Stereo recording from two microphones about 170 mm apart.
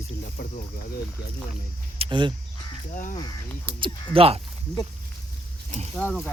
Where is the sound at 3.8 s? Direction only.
35° right (ahead or behind).